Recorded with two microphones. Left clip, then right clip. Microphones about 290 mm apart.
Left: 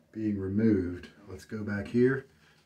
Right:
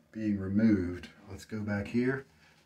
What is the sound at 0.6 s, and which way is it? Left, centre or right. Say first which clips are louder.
Speech: left 2 dB; right.